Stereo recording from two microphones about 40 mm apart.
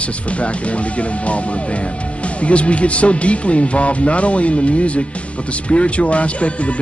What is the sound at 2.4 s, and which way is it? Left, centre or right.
Speech, left.